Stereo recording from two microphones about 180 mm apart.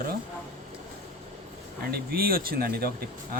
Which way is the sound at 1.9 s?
55° right (ahead or behind).